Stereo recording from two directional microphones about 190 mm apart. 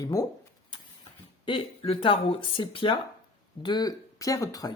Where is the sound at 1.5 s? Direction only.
30° left (ahead or behind).